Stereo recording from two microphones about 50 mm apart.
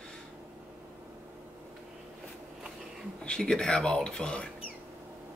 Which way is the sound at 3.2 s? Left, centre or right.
Centre.